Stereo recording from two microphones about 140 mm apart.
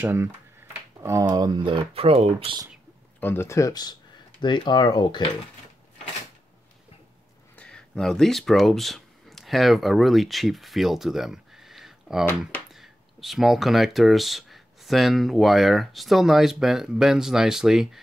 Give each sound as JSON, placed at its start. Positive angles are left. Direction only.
{"t": 0.0, "sound": "speech", "side_deg": -15}
{"t": 3.2, "sound": "speech", "side_deg": 15}
{"t": 7.5, "sound": "speech", "side_deg": 5}